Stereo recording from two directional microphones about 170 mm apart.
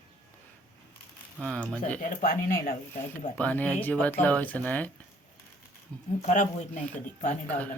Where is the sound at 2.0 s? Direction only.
55° left (ahead or behind).